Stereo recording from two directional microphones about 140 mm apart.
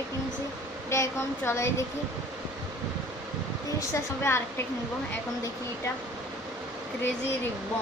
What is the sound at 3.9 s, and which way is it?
Speech, 15° left (ahead or behind).